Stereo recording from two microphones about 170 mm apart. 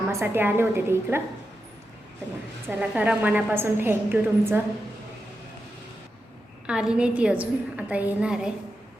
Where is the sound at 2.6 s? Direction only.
10° right (ahead or behind).